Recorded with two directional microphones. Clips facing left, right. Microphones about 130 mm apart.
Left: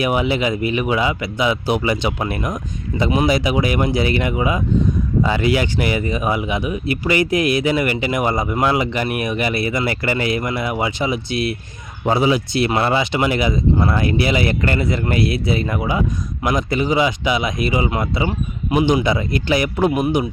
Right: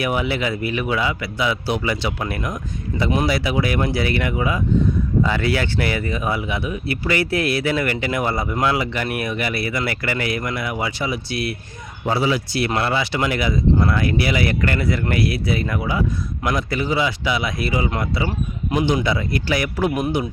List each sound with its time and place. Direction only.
0.0 s a man's voice: 20° left (ahead or behind)
2.9 s speech: 5° left (ahead or behind)
3.2 s a man's voice: 20° left (ahead or behind)